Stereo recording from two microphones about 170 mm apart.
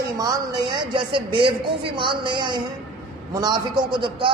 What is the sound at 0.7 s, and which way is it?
A man's voice, 30° right (ahead or behind).